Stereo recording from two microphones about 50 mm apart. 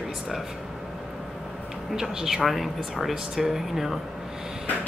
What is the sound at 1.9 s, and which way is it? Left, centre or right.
Speech, centre.